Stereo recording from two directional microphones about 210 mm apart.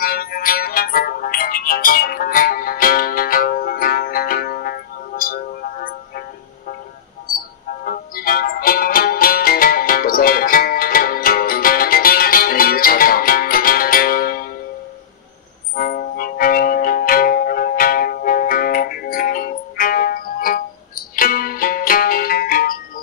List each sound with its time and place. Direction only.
0.0 s music: 45° left (ahead or behind)
7.8 s music: 45° left (ahead or behind)
15.7 s music: 45° left (ahead or behind)